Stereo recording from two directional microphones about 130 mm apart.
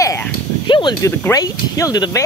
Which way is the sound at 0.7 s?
35° left (ahead or behind).